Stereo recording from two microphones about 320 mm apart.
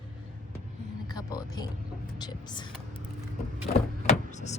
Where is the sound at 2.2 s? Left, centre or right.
Centre.